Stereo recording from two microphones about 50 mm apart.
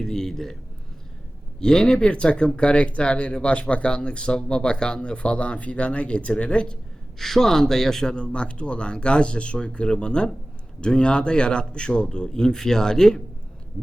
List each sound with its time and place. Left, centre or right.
0.0 s a man's voice: centre
1.5 s speech: centre
7.2 s a man's voice: centre